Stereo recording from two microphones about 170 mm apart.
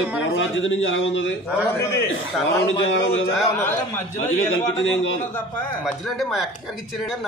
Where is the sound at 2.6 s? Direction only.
90° left.